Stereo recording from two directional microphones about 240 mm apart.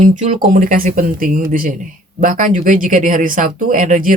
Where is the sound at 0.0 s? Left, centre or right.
Right.